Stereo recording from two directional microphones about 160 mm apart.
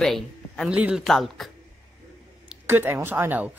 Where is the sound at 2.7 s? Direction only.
15° right (ahead or behind).